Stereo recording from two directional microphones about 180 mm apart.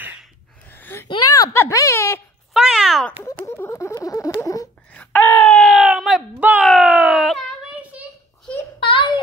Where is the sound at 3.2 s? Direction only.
15° left (ahead or behind).